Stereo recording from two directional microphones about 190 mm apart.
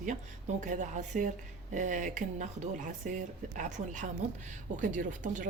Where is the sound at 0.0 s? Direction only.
40° right (ahead or behind).